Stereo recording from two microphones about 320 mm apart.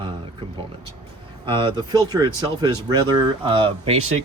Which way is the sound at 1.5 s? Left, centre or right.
Centre.